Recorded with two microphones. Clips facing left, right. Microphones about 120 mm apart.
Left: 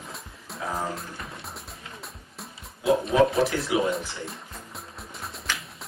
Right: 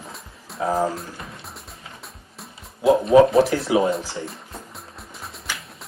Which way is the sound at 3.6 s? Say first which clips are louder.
Right 5 dB; 30° right (ahead or behind).